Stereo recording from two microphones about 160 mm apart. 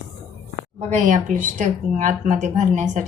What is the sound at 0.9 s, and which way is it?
Speech, 50° right (ahead or behind).